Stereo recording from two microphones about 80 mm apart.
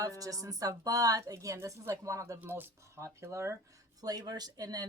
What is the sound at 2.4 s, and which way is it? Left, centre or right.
Speech, right.